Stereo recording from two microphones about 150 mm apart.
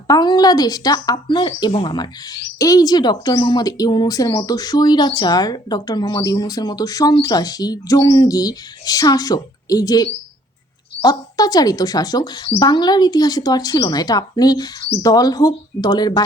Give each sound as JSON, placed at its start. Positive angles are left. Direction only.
{"t": 0.1, "sound": "speech", "side_deg": 25}